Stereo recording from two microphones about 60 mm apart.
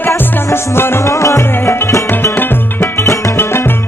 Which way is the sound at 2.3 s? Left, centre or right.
Left.